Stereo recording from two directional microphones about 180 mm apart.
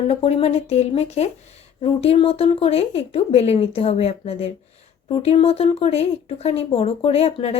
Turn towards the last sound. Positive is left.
turn(degrees=35)  # may be behind; listen again after turning